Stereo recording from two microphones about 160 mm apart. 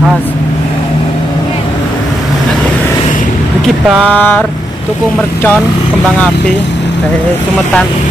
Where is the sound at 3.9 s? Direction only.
5° left (ahead or behind).